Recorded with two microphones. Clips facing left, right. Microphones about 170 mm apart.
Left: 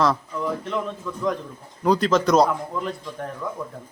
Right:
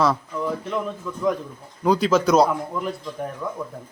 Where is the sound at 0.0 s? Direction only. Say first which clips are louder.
Even; centre (ahead or behind).